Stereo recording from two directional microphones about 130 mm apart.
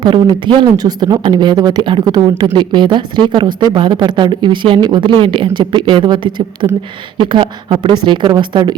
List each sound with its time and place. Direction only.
0.0 s speech: 40° right (ahead or behind)